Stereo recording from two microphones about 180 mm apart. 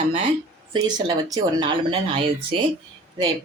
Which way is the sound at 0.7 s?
20° right (ahead or behind).